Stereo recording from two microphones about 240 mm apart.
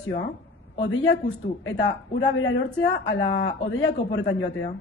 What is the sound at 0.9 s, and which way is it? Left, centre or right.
A woman's voice, left.